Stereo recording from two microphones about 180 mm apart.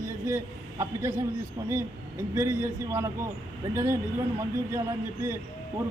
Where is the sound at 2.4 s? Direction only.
15° right (ahead or behind).